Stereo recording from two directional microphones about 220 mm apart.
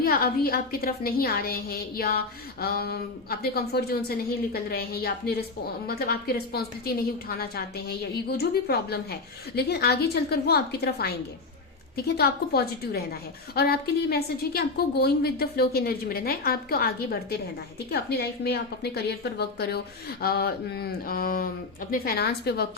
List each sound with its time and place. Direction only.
0.0 s a woman's voice: 40° left (ahead or behind)